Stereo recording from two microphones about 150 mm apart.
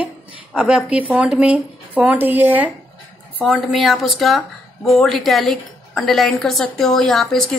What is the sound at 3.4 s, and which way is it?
Speech, centre (ahead or behind).